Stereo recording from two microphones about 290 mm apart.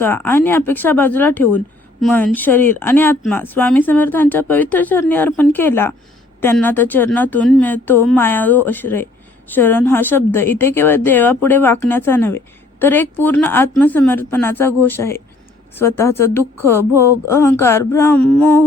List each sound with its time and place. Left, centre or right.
0.0 s speech: centre